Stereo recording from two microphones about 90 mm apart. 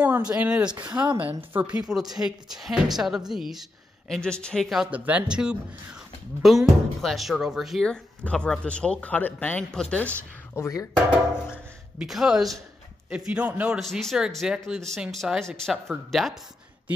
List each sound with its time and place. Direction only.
0.0 s speech: 15° right (ahead or behind)
1.8 s a woman's voice: 5° right (ahead or behind)
4.1 s speech: 10° left (ahead or behind)
4.9 s a woman's voice: 15° right (ahead or behind)
7.8 s speech: 10° left (ahead or behind)
10.6 s speech: 35° left (ahead or behind)
11.5 s speech: 10° right (ahead or behind)
13.7 s a woman's voice: 5° left (ahead or behind)
14.4 s a woman's voice: 5° right (ahead or behind)